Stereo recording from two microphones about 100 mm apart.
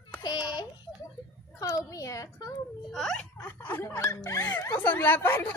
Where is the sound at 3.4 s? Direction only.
20° left (ahead or behind).